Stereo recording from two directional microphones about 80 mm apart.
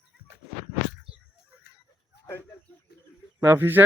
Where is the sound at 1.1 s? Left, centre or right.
Centre.